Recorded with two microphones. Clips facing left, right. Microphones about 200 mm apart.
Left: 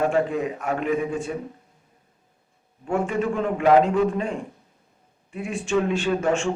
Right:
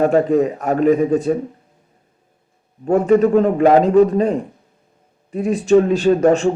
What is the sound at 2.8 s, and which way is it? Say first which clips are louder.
A man's voice: right 11 dB; 40° right (ahead or behind).